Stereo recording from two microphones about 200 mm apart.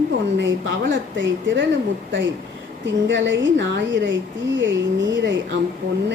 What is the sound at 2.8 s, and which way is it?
A woman's voice, 65° right (ahead or behind).